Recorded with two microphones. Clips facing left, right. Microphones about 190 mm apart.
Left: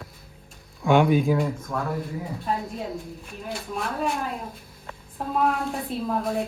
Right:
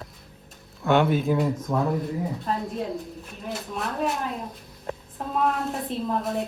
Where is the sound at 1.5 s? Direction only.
20° right (ahead or behind).